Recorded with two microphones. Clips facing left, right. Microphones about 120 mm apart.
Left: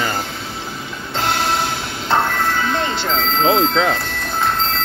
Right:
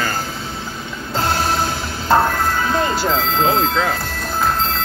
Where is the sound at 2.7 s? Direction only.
5° right (ahead or behind).